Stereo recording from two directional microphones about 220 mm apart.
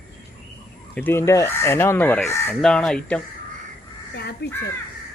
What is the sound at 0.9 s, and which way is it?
Speech, 10° left (ahead or behind).